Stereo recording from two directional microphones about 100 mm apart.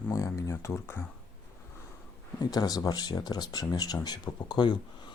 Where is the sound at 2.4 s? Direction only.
40° left (ahead or behind).